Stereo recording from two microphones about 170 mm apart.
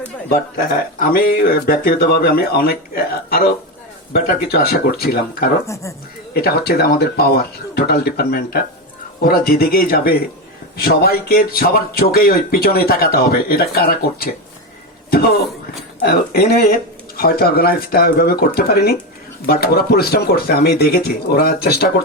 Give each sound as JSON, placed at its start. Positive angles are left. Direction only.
{"t": 0.3, "sound": "speech", "side_deg": 60}
{"t": 5.6, "sound": "speech", "side_deg": 15}
{"t": 6.3, "sound": "speech", "side_deg": 65}
{"t": 16.0, "sound": "speech", "side_deg": 65}